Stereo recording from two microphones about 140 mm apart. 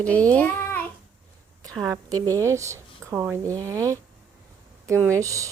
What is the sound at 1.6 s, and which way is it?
Speech, 25° right (ahead or behind).